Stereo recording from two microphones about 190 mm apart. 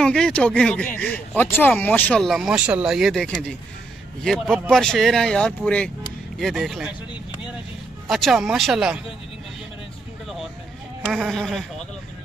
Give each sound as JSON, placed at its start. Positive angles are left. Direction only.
{"t": 0.0, "sound": "speech", "side_deg": 5}
{"t": 8.1, "sound": "speech", "side_deg": 0}
{"t": 11.1, "sound": "speech", "side_deg": 0}